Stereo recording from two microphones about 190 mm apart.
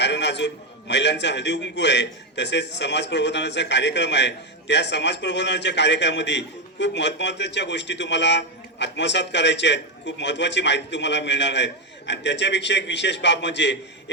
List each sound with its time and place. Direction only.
0.0 s a man's voice: 65° left (ahead or behind)